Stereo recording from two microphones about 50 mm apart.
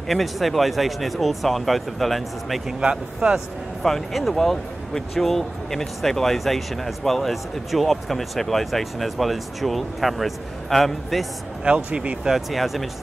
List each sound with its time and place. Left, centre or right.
0.1 s speech: centre
2.8 s speech: right
3.8 s speech: centre
11.6 s speech: right
12.3 s speech: centre